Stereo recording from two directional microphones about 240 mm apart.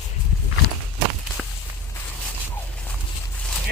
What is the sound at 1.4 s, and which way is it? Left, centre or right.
Walk, centre.